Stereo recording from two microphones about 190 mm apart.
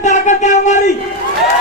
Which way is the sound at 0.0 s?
40° left (ahead or behind).